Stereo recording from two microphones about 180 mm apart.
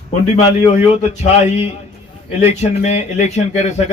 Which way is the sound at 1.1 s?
40° left (ahead or behind).